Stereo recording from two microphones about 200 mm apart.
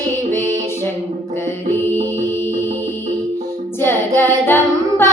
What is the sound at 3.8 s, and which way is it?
Music, 10° left (ahead or behind).